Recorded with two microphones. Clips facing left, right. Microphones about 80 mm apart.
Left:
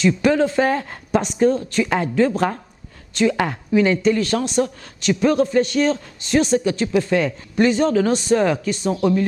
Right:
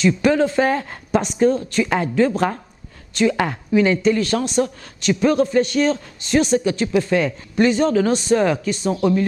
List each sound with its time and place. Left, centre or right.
0.0 s speech: centre